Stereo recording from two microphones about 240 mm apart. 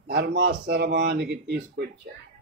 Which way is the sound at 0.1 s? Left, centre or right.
Right.